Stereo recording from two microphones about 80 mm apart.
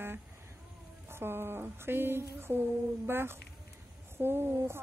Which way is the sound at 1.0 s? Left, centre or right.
Right.